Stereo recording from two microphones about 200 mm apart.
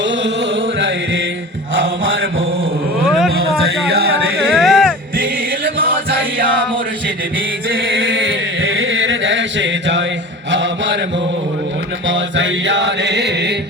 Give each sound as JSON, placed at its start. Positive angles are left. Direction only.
{"t": 0.8, "sound": "chant", "side_deg": -70}
{"t": 3.1, "sound": "a sound", "side_deg": 0}
{"t": 4.5, "sound": "music", "side_deg": 0}
{"t": 5.1, "sound": "music", "side_deg": -45}
{"t": 7.9, "sound": "chant", "side_deg": -70}
{"t": 10.5, "sound": "mantra", "side_deg": -65}
{"t": 12.0, "sound": "mantra", "side_deg": -65}